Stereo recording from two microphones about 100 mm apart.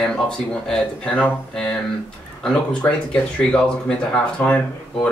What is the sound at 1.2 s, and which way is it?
Speech, 10° left (ahead or behind).